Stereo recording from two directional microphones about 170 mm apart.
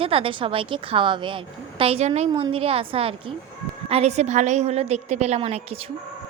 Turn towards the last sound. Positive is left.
turn(degrees=-40)  # may be behind; listen again after turning